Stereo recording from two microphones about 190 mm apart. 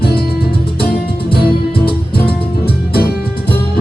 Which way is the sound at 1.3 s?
55° left (ahead or behind).